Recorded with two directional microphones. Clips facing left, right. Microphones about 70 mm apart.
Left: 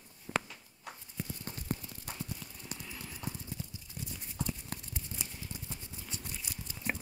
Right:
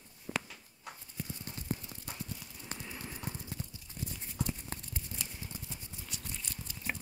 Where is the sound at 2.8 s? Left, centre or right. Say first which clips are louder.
Even; centre.